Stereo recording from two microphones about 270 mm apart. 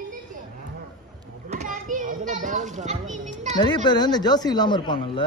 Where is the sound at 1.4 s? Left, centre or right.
Right.